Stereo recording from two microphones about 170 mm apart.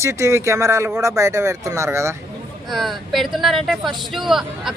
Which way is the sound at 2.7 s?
Centre (ahead or behind).